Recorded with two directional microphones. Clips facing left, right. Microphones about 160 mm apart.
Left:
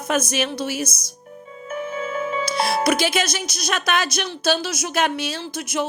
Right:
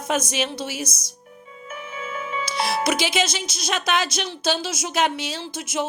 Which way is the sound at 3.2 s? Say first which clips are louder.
Left 2 dB; 25° right (ahead or behind).